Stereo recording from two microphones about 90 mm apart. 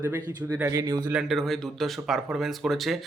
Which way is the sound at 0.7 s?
50° right (ahead or behind).